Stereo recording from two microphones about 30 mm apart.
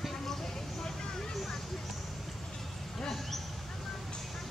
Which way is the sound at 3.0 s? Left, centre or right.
Centre.